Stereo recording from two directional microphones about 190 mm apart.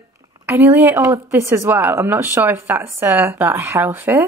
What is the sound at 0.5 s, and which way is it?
Speech, 10° right (ahead or behind).